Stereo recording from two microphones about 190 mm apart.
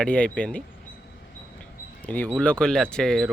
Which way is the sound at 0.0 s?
5° left (ahead or behind).